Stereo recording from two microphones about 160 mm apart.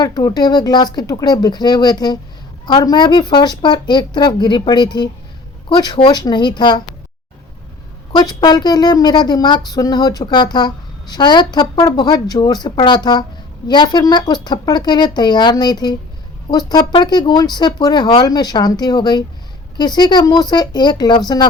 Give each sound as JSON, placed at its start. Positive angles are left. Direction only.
{"t": 0.0, "sound": "speech", "side_deg": 25}
{"t": 8.1, "sound": "speech", "side_deg": 25}